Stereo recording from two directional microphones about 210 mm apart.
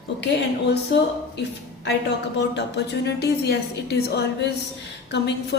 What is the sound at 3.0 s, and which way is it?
A woman's voice, 50° left (ahead or behind).